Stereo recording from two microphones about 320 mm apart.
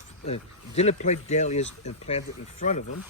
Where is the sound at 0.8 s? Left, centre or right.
Left.